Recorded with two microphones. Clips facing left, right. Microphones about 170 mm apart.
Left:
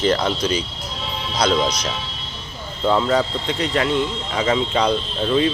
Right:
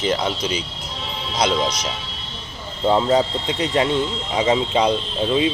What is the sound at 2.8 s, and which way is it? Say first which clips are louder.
Speech: right 1 dB; 25° right (ahead or behind).